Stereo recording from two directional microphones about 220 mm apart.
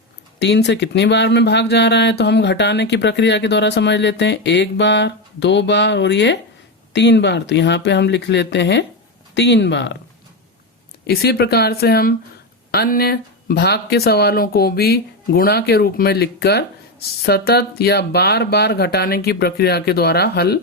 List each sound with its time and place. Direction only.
0.3 s speech: 50° left (ahead or behind)
11.0 s speech: 45° left (ahead or behind)